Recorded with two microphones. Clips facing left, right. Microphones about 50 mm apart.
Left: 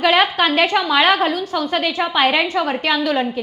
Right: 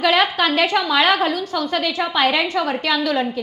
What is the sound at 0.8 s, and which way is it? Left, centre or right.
A woman's voice, centre.